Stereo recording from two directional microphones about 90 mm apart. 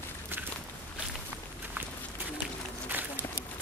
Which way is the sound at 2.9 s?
20° right (ahead or behind).